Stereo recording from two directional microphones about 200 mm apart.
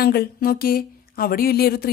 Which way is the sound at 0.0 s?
50° left (ahead or behind).